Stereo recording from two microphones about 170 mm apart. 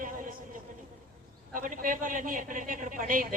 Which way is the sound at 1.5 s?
50° right (ahead or behind).